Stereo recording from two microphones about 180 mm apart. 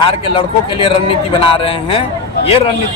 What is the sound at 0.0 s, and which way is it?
A man's voice, 30° left (ahead or behind).